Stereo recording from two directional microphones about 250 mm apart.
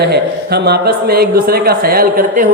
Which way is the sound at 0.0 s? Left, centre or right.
Right.